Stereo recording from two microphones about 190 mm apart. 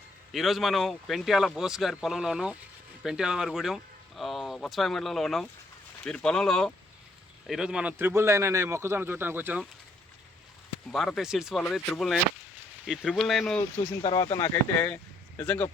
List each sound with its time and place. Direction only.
0.3 s a man's voice: centre (ahead or behind)
10.9 s speech: centre (ahead or behind)
14.0 s speech: 25° left (ahead or behind)